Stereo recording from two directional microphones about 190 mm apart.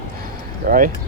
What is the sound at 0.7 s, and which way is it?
Speech, 45° right (ahead or behind).